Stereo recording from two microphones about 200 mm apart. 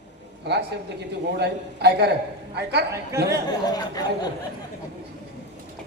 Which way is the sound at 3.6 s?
20° left (ahead or behind).